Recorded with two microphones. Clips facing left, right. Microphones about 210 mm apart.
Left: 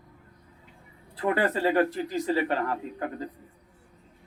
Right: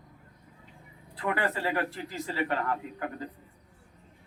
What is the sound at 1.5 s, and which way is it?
Speech, 20° left (ahead or behind).